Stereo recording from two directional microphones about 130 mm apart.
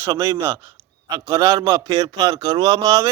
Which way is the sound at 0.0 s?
20° right (ahead or behind).